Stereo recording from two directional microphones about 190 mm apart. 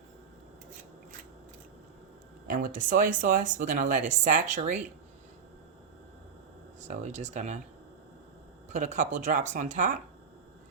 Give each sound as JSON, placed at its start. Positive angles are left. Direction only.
{"t": 2.5, "sound": "speech", "side_deg": -45}
{"t": 6.8, "sound": "speech", "side_deg": -40}
{"t": 8.7, "sound": "speech", "side_deg": -40}